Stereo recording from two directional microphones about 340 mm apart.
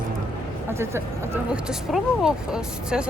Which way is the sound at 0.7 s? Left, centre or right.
Centre.